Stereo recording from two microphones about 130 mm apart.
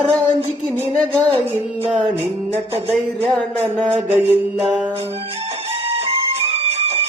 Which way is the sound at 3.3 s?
10° left (ahead or behind).